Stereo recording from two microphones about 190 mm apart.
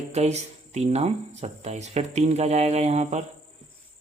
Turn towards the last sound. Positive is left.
turn(degrees=-35)  # may be behind; listen again after turning